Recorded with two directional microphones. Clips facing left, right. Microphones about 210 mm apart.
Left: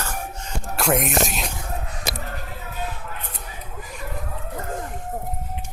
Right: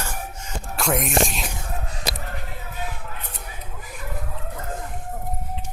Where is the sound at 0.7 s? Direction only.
Centre (ahead or behind).